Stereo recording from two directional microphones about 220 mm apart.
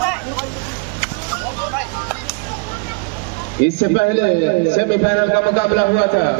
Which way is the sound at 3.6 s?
45° left (ahead or behind).